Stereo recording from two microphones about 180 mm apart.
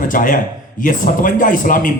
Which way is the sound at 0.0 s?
50° left (ahead or behind).